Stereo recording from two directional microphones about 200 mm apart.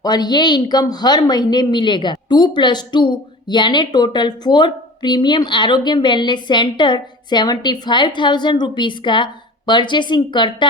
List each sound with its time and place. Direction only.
0.0 s a woman's voice: 20° left (ahead or behind)